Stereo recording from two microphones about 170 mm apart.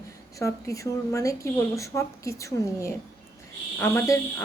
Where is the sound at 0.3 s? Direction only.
20° left (ahead or behind).